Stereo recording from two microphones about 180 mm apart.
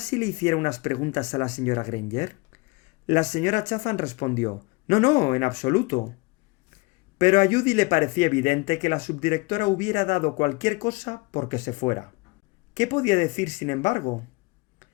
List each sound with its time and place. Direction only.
0.0 s speech: 40° left (ahead or behind)
7.2 s speech: 40° left (ahead or behind)